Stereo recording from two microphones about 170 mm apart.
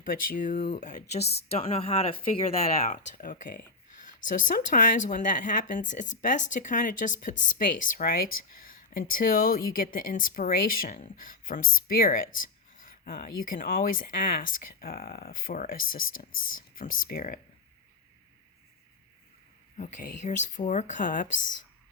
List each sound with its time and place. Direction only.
0.0 s speech: 55° left (ahead or behind)
1.2 s a woman's voice: 70° left (ahead or behind)
1.5 s speech: 35° left (ahead or behind); by 17.4 s 55° left (ahead or behind)
19.7 s speech: 50° left (ahead or behind)